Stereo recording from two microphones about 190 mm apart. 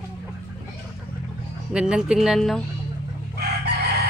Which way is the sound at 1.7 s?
5° right (ahead or behind).